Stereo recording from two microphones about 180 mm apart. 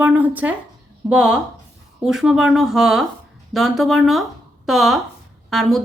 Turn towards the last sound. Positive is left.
turn(degrees=0)  # may be behind; listen again after turning